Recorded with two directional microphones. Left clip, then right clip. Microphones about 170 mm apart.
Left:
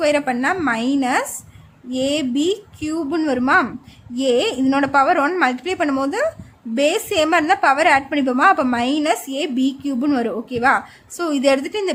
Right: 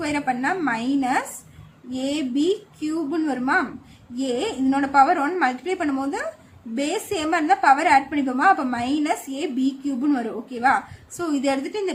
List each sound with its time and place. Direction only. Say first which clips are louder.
0.0 s a woman's voice: left 6 dB; 50° left (ahead or behind)